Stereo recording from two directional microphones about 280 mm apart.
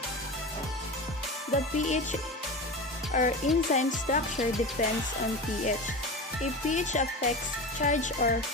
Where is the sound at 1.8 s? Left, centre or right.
Left.